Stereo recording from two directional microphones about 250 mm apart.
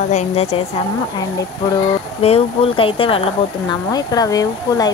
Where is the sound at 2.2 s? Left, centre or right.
Left.